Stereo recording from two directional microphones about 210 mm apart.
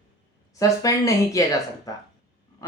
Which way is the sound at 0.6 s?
15° left (ahead or behind).